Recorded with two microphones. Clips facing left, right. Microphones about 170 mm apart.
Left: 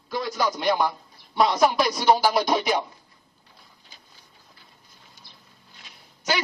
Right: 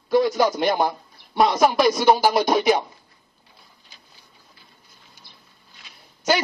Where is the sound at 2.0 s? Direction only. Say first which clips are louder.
Left 1 dB; 50° right (ahead or behind).